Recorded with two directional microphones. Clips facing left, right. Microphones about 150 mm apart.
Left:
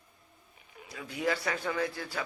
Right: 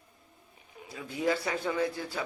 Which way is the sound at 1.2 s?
25° right (ahead or behind).